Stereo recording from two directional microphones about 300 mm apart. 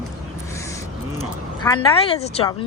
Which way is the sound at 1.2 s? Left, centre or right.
Centre.